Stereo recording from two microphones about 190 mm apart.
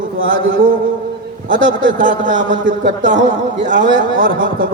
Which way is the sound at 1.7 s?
45° right (ahead or behind).